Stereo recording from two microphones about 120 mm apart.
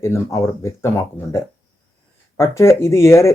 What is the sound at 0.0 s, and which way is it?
Speech, 25° left (ahead or behind).